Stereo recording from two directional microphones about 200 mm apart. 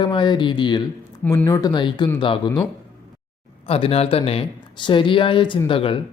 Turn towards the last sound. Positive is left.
turn(degrees=25)  # may be behind; listen again after turning